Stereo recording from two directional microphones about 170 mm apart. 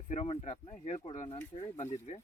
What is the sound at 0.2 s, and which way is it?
Speech, 40° left (ahead or behind).